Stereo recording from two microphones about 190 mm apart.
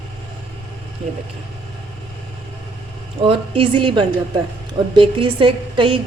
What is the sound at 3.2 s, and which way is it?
Speech, 30° right (ahead or behind).